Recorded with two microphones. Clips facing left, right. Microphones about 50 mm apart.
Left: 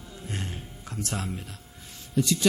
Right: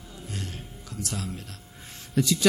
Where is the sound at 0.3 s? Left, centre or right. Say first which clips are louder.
Left 2 dB; left.